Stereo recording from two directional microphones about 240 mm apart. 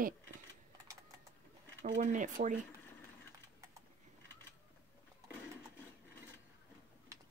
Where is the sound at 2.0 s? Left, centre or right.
Right.